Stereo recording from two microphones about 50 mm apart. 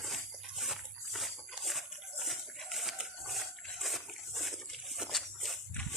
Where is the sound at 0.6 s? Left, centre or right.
Centre.